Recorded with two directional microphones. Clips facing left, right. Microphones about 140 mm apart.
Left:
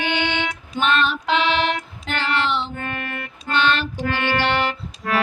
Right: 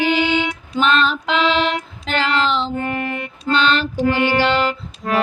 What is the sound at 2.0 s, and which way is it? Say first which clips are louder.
Child singing: right 4 dB; 90° right.